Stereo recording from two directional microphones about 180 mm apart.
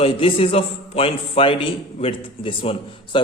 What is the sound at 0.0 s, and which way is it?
A man's voice, 30° left (ahead or behind).